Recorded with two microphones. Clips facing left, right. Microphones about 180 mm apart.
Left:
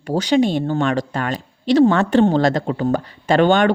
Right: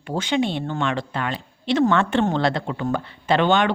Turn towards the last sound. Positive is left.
turn(degrees=45)  # may be behind; listen again after turning